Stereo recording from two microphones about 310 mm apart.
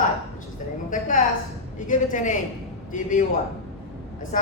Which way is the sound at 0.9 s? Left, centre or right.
Left.